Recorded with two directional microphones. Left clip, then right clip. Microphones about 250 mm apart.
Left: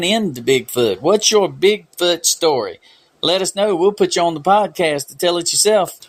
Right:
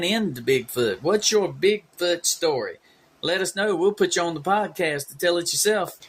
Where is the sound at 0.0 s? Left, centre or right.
Left.